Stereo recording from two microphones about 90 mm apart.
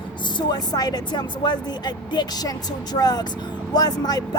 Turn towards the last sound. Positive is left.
turn(degrees=45)  # may be behind; listen again after turning